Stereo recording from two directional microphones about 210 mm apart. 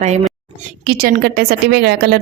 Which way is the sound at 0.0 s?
30° right (ahead or behind).